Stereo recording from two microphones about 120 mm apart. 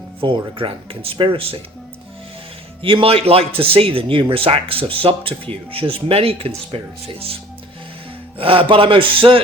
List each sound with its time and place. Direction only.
0.2 s speech: 45° right (ahead or behind)
2.8 s speech: 50° right (ahead or behind)
8.4 s speech: 50° right (ahead or behind)